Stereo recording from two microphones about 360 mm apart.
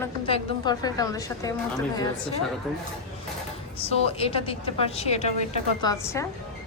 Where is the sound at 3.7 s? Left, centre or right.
Centre.